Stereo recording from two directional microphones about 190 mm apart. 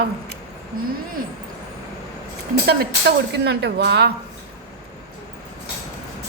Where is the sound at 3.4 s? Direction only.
65° right (ahead or behind).